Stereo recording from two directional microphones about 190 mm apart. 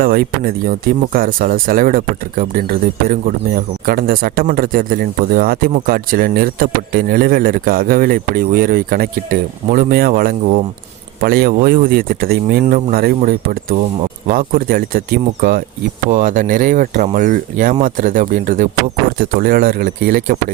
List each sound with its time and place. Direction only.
0.0 s speech: 50° right (ahead or behind)